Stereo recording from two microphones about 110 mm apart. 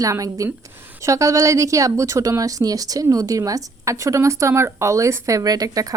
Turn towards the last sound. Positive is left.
turn(degrees=-35)  # may be behind; listen again after turning